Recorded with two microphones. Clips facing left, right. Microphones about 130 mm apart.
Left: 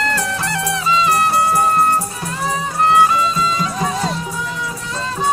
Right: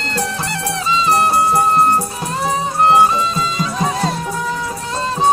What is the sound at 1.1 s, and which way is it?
Music, 30° right (ahead or behind).